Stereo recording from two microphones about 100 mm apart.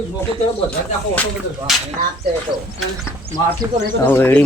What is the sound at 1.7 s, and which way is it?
Speech, 5° right (ahead or behind).